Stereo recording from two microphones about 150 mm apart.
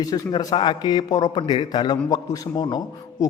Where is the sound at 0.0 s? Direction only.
25° left (ahead or behind).